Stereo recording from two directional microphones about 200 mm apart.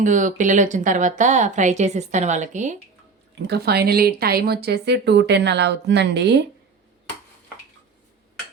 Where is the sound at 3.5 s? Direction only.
50° right (ahead or behind).